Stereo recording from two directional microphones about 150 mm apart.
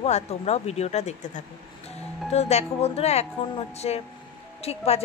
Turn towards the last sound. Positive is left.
turn(degrees=45)  # may be behind; listen again after turning